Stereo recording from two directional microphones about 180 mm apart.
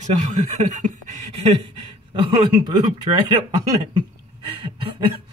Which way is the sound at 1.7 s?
30° right (ahead or behind).